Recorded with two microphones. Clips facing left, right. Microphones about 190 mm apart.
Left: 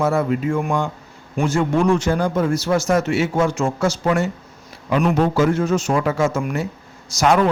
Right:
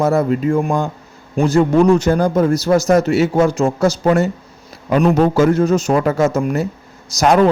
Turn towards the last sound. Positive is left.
turn(degrees=-40)  # may be behind; listen again after turning